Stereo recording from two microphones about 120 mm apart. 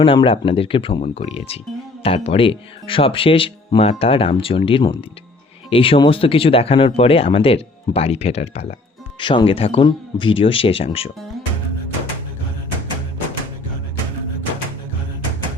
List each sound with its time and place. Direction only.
0.0 s speech: 45° left (ahead or behind)
9.2 s speech: 45° left (ahead or behind)